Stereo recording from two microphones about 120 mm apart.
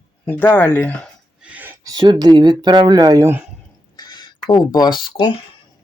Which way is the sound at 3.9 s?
35° left (ahead or behind).